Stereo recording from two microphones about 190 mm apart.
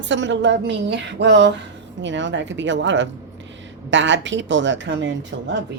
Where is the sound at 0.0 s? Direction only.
70° right (ahead or behind).